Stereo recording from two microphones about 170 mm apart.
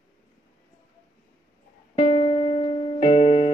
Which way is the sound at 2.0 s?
30° left (ahead or behind).